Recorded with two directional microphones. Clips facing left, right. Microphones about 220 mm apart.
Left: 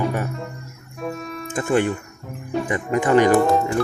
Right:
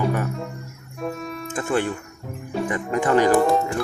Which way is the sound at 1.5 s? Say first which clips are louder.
Left 4 dB; 15° left (ahead or behind).